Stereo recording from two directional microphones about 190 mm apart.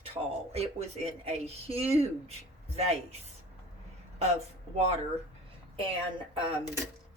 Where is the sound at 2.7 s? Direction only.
35° right (ahead or behind).